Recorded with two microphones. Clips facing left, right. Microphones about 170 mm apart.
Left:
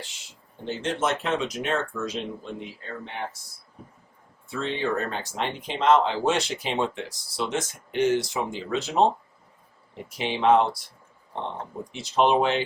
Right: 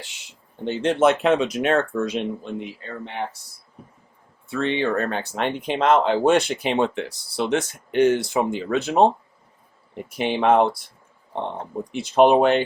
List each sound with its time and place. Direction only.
0.6 s speech: 60° right (ahead or behind)
4.4 s speech: 65° right (ahead or behind)
10.1 s speech: 55° right (ahead or behind)
11.9 s speech: 55° right (ahead or behind)